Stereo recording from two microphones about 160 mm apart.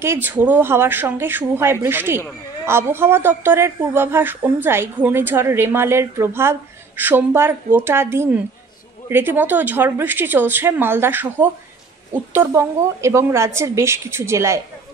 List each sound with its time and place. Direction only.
0.0 s speech: 15° right (ahead or behind)